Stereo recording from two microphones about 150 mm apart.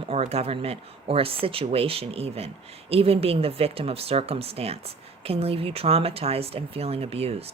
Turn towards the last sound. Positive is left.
turn(degrees=-40)  # may be behind; listen again after turning